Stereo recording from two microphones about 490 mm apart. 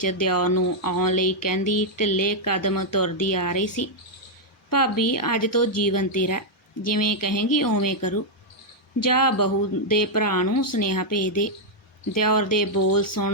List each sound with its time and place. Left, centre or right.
0.0 s speech: left